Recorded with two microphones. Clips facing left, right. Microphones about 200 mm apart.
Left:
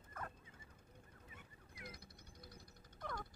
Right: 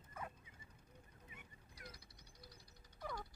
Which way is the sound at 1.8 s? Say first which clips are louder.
Left 3 dB; 50° left (ahead or behind).